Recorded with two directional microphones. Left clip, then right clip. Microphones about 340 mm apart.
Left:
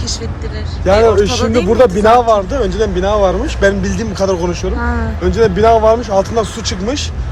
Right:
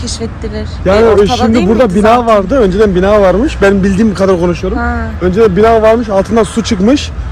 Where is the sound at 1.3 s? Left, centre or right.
Centre.